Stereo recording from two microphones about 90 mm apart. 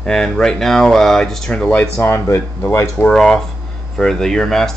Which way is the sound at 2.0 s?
30° left (ahead or behind).